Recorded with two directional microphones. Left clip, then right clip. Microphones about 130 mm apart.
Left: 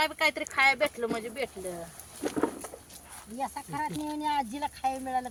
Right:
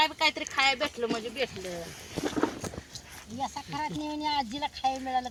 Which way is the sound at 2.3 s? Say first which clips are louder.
Even; 75° right (ahead or behind).